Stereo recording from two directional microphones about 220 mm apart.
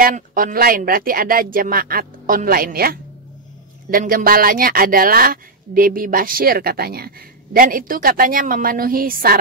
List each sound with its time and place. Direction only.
0.0 s speech: 40° right (ahead or behind)